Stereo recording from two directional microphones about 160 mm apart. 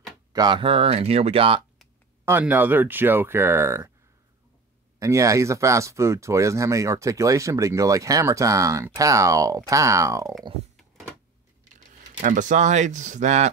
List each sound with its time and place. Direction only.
0.0 s speech: 25° right (ahead or behind)
2.2 s speech: 10° right (ahead or behind)
4.9 s speech: 20° right (ahead or behind)
11.9 s speech: 55° right (ahead or behind)